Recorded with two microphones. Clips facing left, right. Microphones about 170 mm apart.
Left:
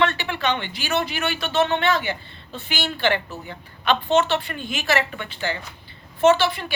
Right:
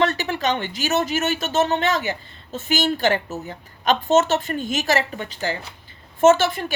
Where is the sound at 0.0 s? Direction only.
40° right (ahead or behind).